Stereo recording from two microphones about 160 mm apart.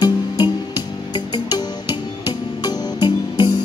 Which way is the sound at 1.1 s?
30° left (ahead or behind).